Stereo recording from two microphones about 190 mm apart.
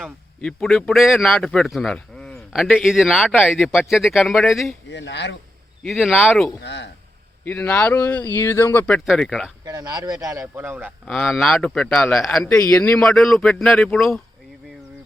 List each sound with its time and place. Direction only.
0.0 s speech: centre (ahead or behind)
4.9 s speech: 70° left (ahead or behind)
5.8 s speech: centre (ahead or behind)
6.6 s speech: 65° left (ahead or behind)
7.4 s speech: 10° left (ahead or behind)
9.0 s speech: centre (ahead or behind)
9.6 s speech: 20° right (ahead or behind)
11.0 s speech: 5° left (ahead or behind)